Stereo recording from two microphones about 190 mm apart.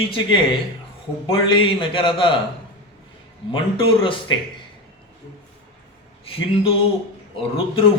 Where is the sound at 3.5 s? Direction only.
25° left (ahead or behind).